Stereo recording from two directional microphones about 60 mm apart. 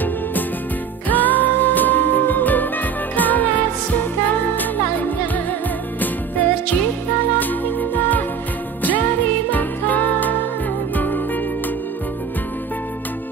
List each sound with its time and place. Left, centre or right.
1.0 s music: left
7.3 s music: left
9.5 s music: left